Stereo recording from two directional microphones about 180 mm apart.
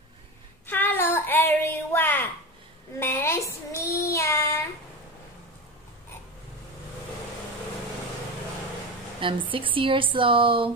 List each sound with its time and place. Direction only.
0.7 s child singing: 10° left (ahead or behind)
9.2 s speech: 30° right (ahead or behind)